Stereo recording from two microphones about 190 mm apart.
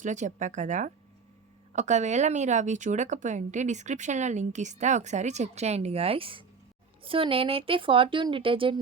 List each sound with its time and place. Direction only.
0.0 s a woman's voice: 40° right (ahead or behind)